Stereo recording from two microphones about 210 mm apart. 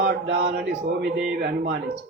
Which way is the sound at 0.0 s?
50° right (ahead or behind).